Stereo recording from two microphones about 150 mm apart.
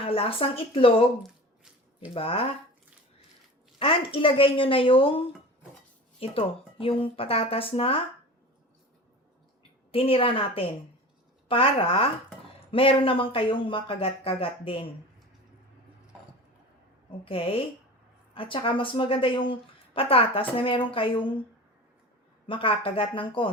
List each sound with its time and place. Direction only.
0.0 s speech: 40° left (ahead or behind)
2.1 s speech: 40° left (ahead or behind)
3.8 s speech: 35° left (ahead or behind)
9.9 s speech: 40° left (ahead or behind)
17.1 s speech: 40° left (ahead or behind)
22.4 s speech: 35° left (ahead or behind)